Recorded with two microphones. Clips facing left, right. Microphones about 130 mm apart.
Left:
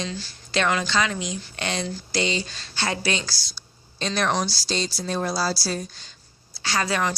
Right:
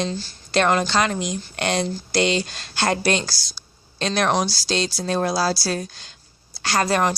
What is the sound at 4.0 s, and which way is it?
A woman's voice, 70° right (ahead or behind).